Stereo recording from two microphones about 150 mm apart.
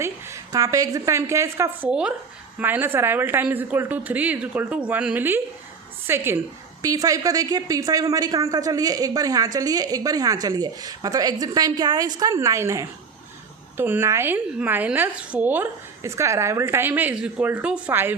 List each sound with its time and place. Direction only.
0.0 s a woman's voice: 20° right (ahead or behind)
1.9 s a woman's voice: 5° right (ahead or behind)